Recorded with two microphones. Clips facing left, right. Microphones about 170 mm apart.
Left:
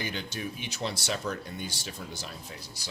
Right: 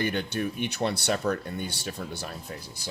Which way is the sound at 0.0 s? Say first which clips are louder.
Right 7 dB; 60° right (ahead or behind).